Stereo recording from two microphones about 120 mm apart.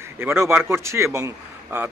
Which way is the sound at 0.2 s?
20° right (ahead or behind).